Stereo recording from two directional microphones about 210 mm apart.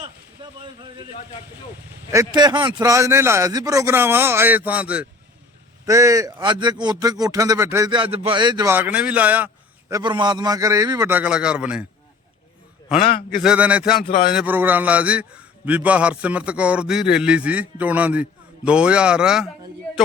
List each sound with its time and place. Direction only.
0.0 s a sound: 20° right (ahead or behind)
2.1 s a man's voice: 20° right (ahead or behind)
9.9 s a man's voice: 20° right (ahead or behind); by 11.9 s 5° right (ahead or behind)
13.0 s a man's voice: 25° left (ahead or behind)
13.4 s a man's voice: 5° right (ahead or behind)